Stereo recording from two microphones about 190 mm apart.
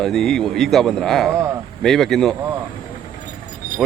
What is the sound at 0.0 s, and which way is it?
Speech, centre (ahead or behind).